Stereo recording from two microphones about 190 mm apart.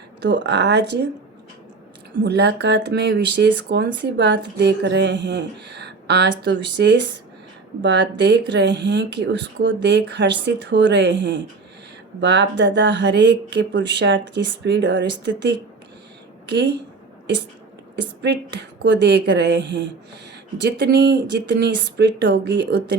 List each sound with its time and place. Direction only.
0.2 s speech: 65° right (ahead or behind)
2.1 s speech: 60° right (ahead or behind)
18.2 s speech: 65° right (ahead or behind)